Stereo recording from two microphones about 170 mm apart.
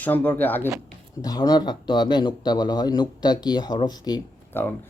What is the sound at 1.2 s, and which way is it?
A man's voice, 25° left (ahead or behind).